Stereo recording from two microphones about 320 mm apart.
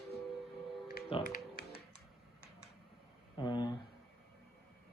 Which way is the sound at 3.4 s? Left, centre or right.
Centre.